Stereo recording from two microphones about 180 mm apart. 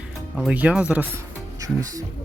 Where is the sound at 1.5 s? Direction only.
20° right (ahead or behind).